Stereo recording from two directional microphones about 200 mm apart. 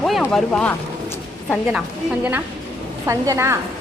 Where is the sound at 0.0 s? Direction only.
Centre (ahead or behind).